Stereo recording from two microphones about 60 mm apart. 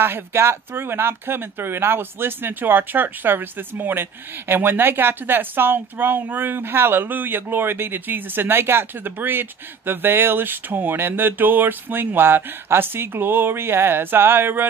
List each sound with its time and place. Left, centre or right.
0.0 s speech: right